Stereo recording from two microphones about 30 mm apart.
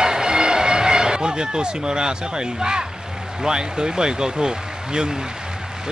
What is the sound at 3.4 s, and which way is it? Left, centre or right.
Speech, right.